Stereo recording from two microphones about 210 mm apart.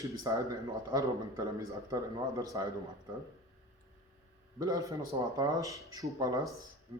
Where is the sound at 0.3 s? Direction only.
20° right (ahead or behind).